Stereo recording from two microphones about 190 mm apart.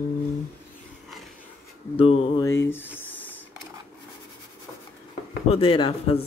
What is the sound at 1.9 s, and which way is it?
Speech, 30° left (ahead or behind).